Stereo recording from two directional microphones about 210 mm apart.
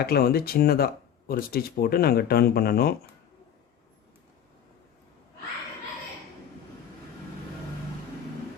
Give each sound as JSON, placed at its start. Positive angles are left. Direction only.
{"t": 0.0, "sound": "speech", "side_deg": 45}